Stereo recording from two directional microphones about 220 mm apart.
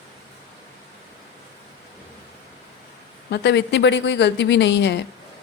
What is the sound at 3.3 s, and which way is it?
A woman's voice, 50° left (ahead or behind).